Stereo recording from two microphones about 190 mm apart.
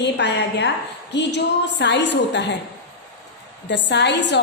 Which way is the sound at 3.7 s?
65° left (ahead or behind).